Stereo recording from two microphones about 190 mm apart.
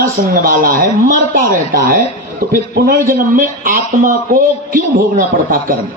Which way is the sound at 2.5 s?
50° right (ahead or behind).